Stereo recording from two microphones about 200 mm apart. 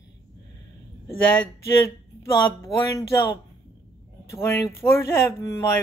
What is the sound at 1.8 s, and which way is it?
Speech, 15° left (ahead or behind).